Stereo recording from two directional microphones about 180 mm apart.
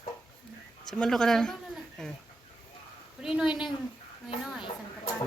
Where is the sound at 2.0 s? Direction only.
5° left (ahead or behind).